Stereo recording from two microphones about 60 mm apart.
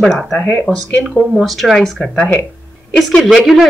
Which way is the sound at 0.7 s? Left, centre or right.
Right.